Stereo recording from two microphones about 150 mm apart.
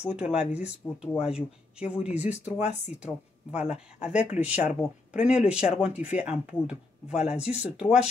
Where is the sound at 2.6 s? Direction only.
45° left (ahead or behind).